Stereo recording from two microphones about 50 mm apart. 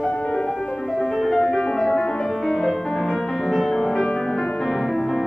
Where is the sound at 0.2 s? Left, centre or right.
Centre.